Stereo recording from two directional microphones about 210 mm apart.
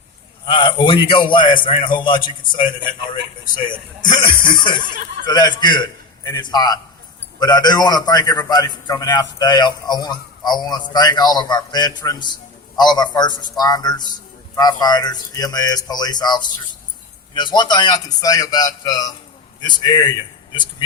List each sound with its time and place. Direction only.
0.4 s a man's voice: 25° left (ahead or behind)